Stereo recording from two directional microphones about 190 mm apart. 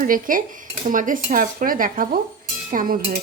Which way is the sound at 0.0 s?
45° right (ahead or behind).